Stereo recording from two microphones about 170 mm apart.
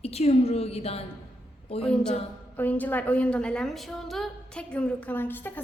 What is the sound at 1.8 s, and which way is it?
A woman's voice, 5° left (ahead or behind).